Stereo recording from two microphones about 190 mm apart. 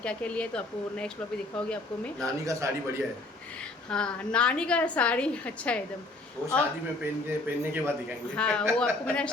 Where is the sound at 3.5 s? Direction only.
5° left (ahead or behind).